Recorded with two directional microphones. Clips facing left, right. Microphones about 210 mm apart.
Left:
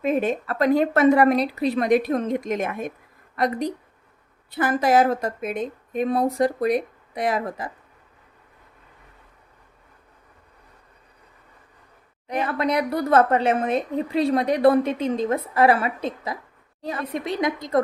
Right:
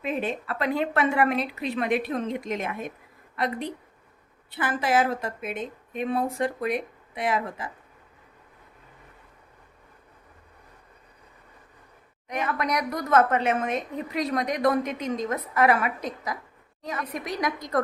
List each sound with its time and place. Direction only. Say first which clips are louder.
0.0 s a woman's voice: left 7 dB; 45° left (ahead or behind)
12.3 s a woman's voice: left 4 dB; 30° left (ahead or behind)